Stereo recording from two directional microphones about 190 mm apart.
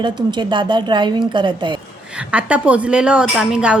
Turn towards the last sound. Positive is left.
turn(degrees=-5)  # may be behind; listen again after turning